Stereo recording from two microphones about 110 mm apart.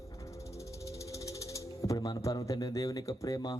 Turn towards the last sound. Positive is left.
turn(degrees=30)  # may be behind; listen again after turning